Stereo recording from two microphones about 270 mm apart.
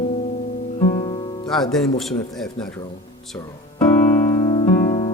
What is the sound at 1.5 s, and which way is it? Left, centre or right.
A man's voice, centre.